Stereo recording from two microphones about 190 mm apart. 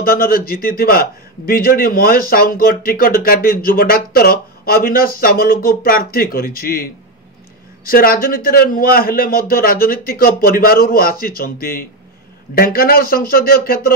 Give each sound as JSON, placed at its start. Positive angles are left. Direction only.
{"t": 0.0, "sound": "a man's voice", "side_deg": 50}